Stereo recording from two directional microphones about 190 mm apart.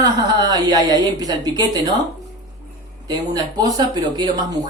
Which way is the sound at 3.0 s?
20° right (ahead or behind).